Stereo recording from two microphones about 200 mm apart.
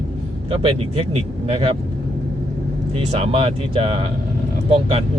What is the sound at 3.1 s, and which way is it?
Speech, 30° right (ahead or behind).